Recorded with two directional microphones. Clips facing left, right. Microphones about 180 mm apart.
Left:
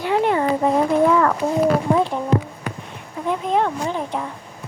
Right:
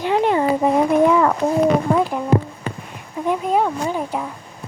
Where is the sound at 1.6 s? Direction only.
Centre (ahead or behind).